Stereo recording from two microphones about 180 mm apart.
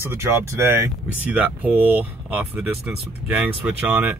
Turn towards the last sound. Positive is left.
turn(degrees=-10)  # may be behind; listen again after turning